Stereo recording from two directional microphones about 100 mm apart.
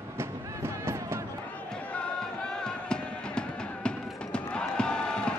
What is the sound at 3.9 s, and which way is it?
Music, 10° left (ahead or behind).